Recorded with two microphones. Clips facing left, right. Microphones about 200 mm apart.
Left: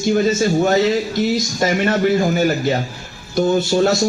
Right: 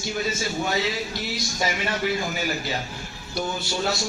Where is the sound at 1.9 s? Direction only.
45° left (ahead or behind).